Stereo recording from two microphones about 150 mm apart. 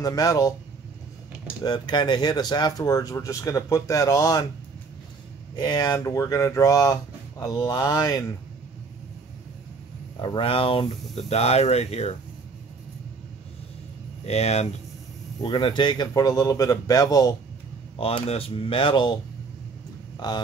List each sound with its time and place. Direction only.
0.0 s speech: 25° left (ahead or behind)
1.6 s speech: 30° left (ahead or behind)
5.6 s speech: 25° left (ahead or behind)
10.1 s speech: 30° left (ahead or behind)
14.2 s speech: 45° left (ahead or behind)
15.4 s speech: 30° left (ahead or behind)
17.9 s speech: 40° left (ahead or behind)